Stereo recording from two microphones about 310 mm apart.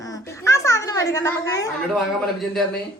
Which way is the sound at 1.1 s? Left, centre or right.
Centre.